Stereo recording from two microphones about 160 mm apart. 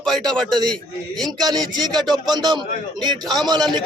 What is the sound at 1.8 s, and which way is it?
A man's voice, 25° right (ahead or behind).